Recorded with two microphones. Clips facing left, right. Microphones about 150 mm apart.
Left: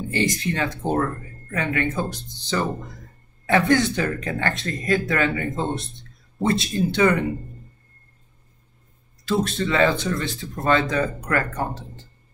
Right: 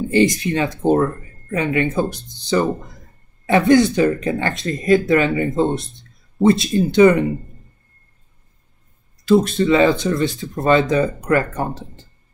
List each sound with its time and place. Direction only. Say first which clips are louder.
0.1 s speech: right 8 dB; 15° right (ahead or behind)
9.4 s speech: right 5 dB; 15° right (ahead or behind)